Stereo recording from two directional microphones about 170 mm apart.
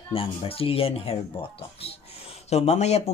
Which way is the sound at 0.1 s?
35° left (ahead or behind).